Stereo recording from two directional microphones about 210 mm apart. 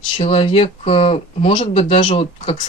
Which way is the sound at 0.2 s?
25° left (ahead or behind).